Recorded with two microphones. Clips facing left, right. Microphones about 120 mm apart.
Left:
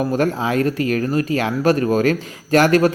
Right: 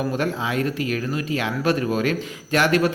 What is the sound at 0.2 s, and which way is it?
Speech, 40° left (ahead or behind).